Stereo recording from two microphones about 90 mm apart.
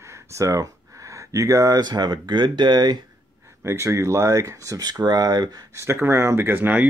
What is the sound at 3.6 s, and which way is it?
Speech, 30° right (ahead or behind).